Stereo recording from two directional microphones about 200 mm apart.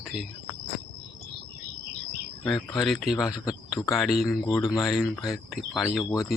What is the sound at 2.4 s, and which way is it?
Speech, centre (ahead or behind).